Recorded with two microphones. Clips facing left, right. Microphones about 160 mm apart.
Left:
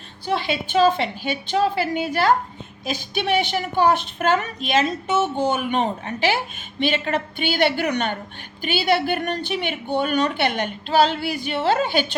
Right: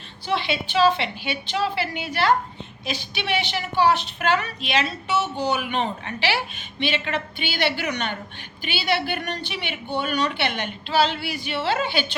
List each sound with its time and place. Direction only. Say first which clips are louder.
0.3 s a woman's voice: left 2 dB; 45° left (ahead or behind)